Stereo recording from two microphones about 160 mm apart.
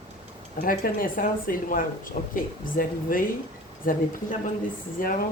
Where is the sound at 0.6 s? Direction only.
60° left (ahead or behind).